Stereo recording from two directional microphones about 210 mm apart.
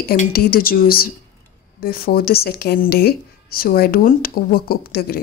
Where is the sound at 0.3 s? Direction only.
45° left (ahead or behind).